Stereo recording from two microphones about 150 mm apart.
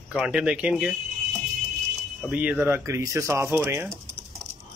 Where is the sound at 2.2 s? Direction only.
5° right (ahead or behind).